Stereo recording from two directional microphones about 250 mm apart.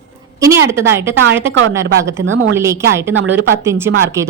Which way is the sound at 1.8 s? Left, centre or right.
Right.